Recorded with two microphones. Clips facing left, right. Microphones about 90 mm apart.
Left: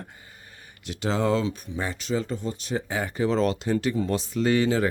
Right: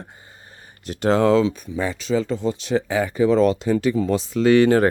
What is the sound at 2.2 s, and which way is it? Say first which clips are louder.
Speech: right 7 dB; 90° right.